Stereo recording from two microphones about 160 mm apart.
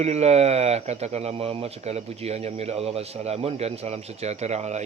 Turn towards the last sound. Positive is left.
turn(degrees=-45)  # may be behind; listen again after turning